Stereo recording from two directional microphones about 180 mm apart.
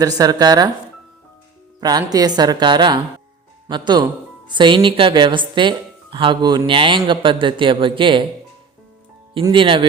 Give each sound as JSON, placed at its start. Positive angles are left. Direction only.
{"t": 0.0, "sound": "speech", "side_deg": -20}
{"t": 1.8, "sound": "speech", "side_deg": -20}
{"t": 9.3, "sound": "speech", "side_deg": -25}